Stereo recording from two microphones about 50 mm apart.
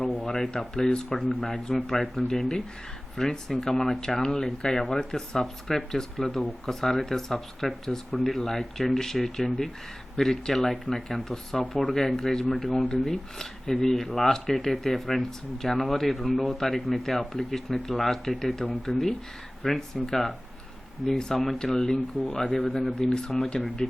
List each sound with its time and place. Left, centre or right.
0.3 s speech: centre
23.6 s speech: centre